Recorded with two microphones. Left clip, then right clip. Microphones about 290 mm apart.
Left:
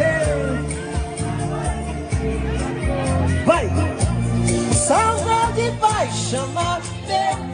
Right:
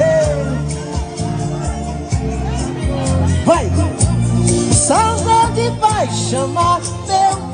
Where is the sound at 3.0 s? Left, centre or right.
Right.